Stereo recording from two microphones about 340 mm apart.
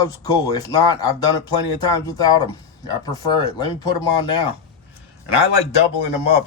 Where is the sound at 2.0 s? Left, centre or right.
Centre.